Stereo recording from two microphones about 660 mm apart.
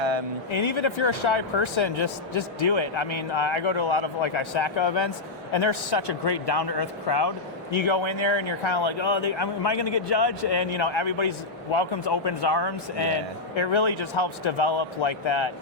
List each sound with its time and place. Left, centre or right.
0.5 s speech: left